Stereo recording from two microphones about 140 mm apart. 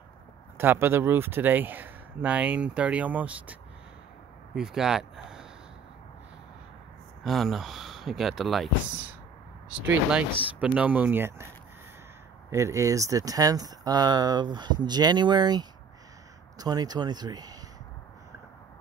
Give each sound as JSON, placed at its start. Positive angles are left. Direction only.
{"t": 0.6, "sound": "speech", "side_deg": -15}
{"t": 4.6, "sound": "speech", "side_deg": -5}
{"t": 7.2, "sound": "speech", "side_deg": 0}
{"t": 9.7, "sound": "speech", "side_deg": -10}
{"t": 12.4, "sound": "speech", "side_deg": -20}